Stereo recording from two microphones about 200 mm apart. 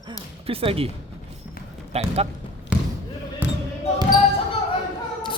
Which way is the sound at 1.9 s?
30° right (ahead or behind).